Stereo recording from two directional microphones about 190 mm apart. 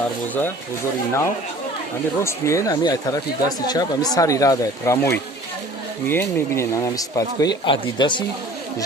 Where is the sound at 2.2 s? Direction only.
15° left (ahead or behind).